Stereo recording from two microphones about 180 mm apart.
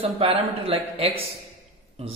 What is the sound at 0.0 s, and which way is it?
A man's voice, 30° right (ahead or behind).